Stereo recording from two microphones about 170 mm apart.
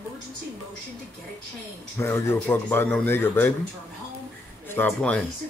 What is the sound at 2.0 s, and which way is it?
A man's voice, 15° left (ahead or behind).